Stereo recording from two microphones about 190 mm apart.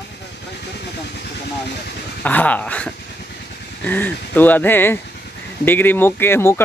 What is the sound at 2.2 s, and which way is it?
Speech, 10° left (ahead or behind).